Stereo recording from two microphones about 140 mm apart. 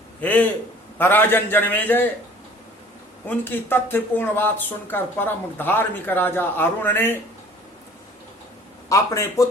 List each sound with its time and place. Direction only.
0.2 s a man's voice: 10° left (ahead or behind)
3.2 s speech: 15° left (ahead or behind)
8.9 s speech: 20° left (ahead or behind)